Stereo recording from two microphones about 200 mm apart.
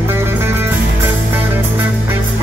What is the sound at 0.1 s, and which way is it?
Music, 10° right (ahead or behind).